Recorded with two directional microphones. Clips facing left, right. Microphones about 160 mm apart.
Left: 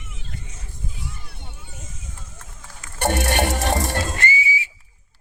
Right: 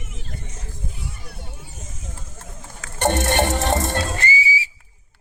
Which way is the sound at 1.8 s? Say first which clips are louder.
Right 3 dB; 40° right (ahead or behind).